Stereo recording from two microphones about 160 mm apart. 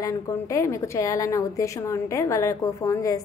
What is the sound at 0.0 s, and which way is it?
A woman's voice, 20° left (ahead or behind).